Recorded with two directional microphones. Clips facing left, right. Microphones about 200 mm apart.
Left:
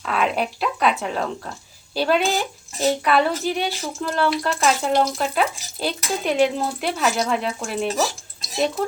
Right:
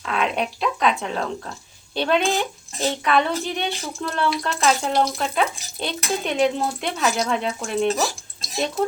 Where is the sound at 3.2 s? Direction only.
5° left (ahead or behind).